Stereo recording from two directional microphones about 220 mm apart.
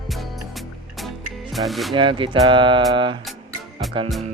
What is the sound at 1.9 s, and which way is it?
Speech, 20° right (ahead or behind).